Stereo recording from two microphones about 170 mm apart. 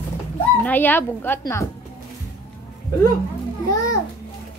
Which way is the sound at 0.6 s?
10° left (ahead or behind).